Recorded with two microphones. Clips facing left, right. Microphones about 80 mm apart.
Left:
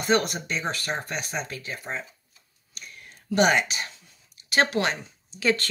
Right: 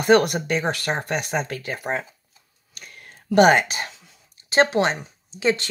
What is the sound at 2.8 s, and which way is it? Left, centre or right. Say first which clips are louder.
Whispering: right 2 dB; right.